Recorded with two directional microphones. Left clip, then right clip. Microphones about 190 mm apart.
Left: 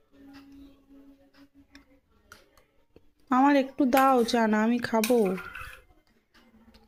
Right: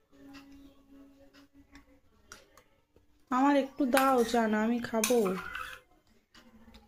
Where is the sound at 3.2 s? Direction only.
45° left (ahead or behind).